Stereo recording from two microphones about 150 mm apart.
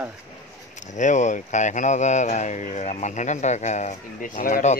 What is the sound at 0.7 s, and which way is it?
Speech, 55° left (ahead or behind).